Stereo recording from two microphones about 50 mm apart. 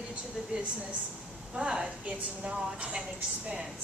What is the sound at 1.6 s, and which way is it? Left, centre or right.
A woman's voice, centre.